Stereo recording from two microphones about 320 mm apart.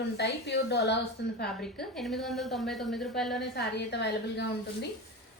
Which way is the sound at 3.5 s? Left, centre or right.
Left.